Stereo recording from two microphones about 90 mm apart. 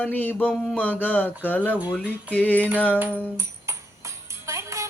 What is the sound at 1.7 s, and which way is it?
Music, 15° right (ahead or behind).